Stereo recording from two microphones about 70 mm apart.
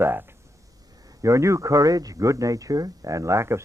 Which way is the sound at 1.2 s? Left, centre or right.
Right.